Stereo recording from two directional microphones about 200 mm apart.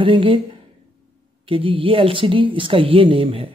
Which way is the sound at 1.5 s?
25° right (ahead or behind).